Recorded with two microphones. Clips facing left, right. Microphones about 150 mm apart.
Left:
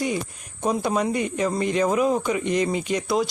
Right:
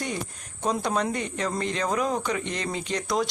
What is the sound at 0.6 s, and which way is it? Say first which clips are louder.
Speech: left 3 dB; 10° left (ahead or behind).